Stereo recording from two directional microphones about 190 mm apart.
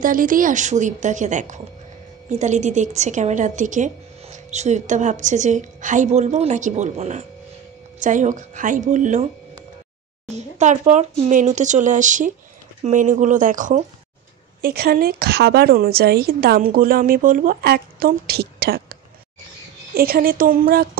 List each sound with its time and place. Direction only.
0.0 s a woman's voice: 45° right (ahead or behind)